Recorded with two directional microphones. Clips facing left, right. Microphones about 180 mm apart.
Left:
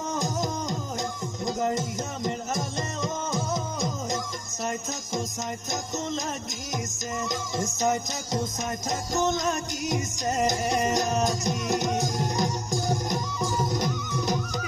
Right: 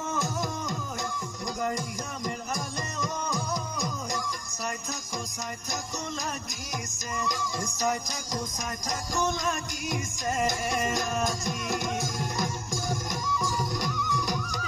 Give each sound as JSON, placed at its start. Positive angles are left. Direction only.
{"t": 0.1, "sound": "a sound", "side_deg": 20}
{"t": 1.4, "sound": "music", "side_deg": 25}
{"t": 7.2, "sound": "music", "side_deg": 20}